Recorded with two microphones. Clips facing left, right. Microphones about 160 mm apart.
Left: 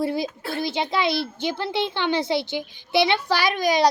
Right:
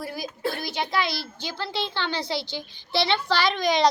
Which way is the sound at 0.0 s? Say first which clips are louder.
Left 5 dB; 25° left (ahead or behind).